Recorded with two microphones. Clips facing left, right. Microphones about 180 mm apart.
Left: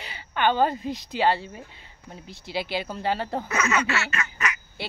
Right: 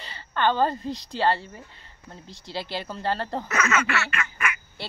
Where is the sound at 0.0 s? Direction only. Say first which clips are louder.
Even; 10° left (ahead or behind).